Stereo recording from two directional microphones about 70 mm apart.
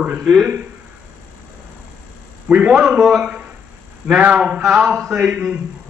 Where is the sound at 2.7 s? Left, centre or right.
Centre.